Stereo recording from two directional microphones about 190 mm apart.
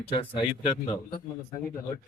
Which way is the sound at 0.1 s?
30° left (ahead or behind).